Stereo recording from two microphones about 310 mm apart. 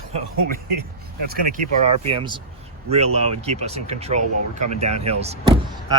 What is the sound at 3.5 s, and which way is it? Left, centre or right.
Speech, centre.